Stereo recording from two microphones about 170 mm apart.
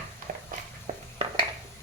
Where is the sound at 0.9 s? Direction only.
40° right (ahead or behind).